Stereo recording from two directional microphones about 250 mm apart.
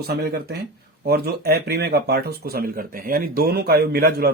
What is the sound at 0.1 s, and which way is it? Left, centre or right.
Speech, right.